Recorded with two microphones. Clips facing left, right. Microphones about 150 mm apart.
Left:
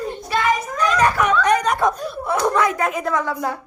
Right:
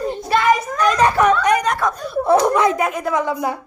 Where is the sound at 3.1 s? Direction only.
15° right (ahead or behind).